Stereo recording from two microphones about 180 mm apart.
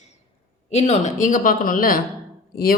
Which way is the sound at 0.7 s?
35° left (ahead or behind).